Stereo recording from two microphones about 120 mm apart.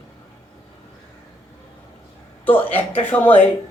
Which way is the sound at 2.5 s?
15° left (ahead or behind).